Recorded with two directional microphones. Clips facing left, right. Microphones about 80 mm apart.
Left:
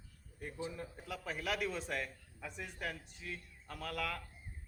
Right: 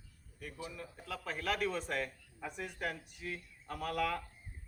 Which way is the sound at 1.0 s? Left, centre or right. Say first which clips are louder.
Right 3 dB; centre.